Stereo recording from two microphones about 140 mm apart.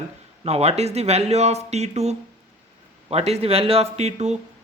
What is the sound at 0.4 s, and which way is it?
Speech, 50° right (ahead or behind).